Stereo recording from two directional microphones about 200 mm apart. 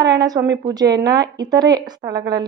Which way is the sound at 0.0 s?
20° right (ahead or behind).